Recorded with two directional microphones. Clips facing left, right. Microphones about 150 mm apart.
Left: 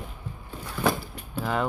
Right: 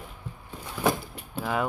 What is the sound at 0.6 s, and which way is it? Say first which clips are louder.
Vehicle: even; 15° right (ahead or behind).